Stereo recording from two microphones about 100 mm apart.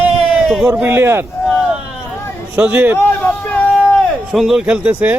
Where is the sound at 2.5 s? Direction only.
20° right (ahead or behind).